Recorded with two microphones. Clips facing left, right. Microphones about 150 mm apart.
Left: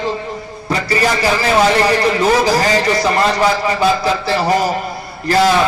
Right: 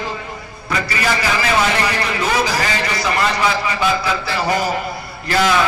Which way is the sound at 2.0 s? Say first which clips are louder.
Left 6 dB; 35° left (ahead or behind).